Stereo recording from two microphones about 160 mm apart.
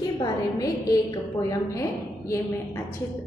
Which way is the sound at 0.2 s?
20° left (ahead or behind).